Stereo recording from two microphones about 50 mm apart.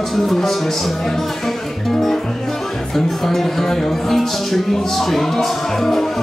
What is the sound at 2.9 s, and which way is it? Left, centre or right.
Speech, centre.